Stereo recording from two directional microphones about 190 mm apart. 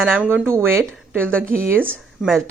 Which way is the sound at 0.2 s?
10° right (ahead or behind).